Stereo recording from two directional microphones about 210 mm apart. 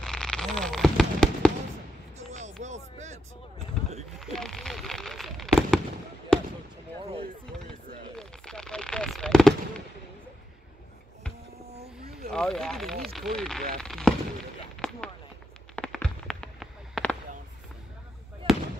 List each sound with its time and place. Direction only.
0.0 s fireworks: 5° left (ahead or behind)
2.1 s a sound: 35° right (ahead or behind)
2.6 s vehicle: 35° right (ahead or behind)
4.2 s fireworks: centre (ahead or behind)
6.3 s basketball bounce: 5° left (ahead or behind)
8.2 s machine gun: 5° left (ahead or behind)
12.3 s a sound: centre (ahead or behind)